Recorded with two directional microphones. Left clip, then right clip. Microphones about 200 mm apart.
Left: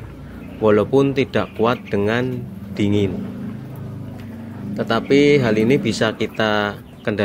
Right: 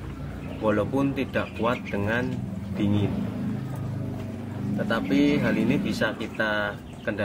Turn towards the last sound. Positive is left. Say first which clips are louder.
# left 6 dB
turn(degrees=45)  # may be behind; listen again after turning